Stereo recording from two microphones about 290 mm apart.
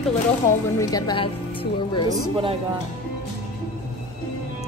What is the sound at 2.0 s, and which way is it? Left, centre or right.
Speech, centre.